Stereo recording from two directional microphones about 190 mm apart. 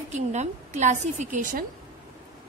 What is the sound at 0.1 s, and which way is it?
A woman's voice, 35° right (ahead or behind).